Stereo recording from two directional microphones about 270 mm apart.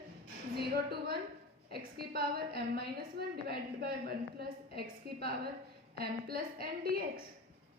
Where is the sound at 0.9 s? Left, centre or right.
Right.